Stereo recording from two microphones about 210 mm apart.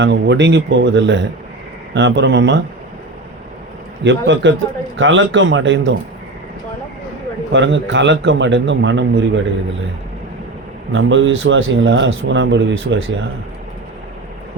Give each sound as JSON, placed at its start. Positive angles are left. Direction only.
{"t": 0.0, "sound": "a man's voice", "side_deg": -60}
{"t": 4.0, "sound": "a man's voice", "side_deg": -60}
{"t": 7.5, "sound": "a man's voice", "side_deg": -60}
{"t": 10.9, "sound": "a man's voice", "side_deg": -65}